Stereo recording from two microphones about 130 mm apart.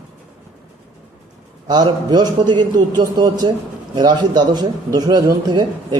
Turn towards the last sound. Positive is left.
turn(degrees=-30)  # may be behind; listen again after turning